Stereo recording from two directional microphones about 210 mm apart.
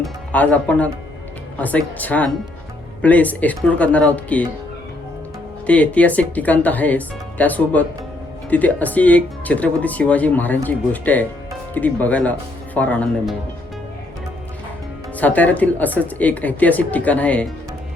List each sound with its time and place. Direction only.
0.0 s speech: 5° left (ahead or behind)
5.6 s speech: 5° left (ahead or behind)
15.2 s speech: 5° left (ahead or behind)